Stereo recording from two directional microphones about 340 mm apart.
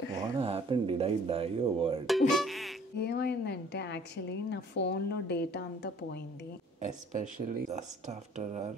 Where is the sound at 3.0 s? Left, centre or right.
Left.